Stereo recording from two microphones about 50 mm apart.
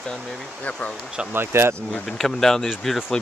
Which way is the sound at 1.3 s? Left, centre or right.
Right.